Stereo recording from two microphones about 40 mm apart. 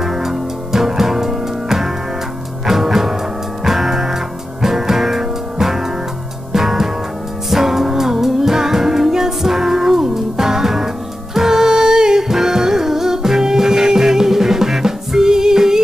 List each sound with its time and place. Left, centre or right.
0.0 s music: centre